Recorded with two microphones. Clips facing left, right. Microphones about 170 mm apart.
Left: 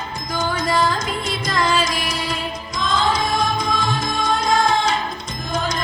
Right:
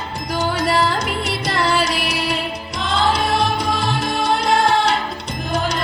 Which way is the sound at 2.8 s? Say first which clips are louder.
Right 2 dB; 70° right (ahead or behind).